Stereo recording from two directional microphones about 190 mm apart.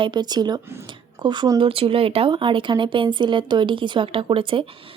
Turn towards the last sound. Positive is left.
turn(degrees=-25)  # may be behind; listen again after turning